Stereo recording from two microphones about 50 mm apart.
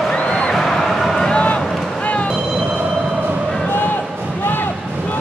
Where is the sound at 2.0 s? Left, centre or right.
Left.